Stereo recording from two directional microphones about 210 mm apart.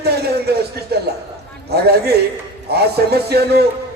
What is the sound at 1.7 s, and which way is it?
A man's voice, 50° right (ahead or behind).